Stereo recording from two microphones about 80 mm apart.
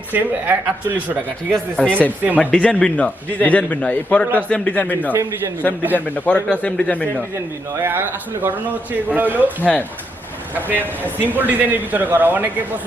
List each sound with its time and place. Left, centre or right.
0.1 s a man's voice: right
1.7 s a man's voice: centre
6.1 s a man's voice: centre
7.8 s a man's voice: right
10.8 s a man's voice: left
11.3 s a man's voice: right